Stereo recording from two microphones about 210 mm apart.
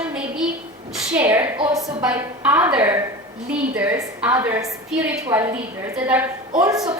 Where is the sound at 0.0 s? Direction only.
5° right (ahead or behind).